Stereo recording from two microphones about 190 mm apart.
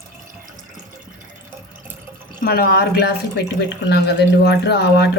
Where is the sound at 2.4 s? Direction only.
50° left (ahead or behind).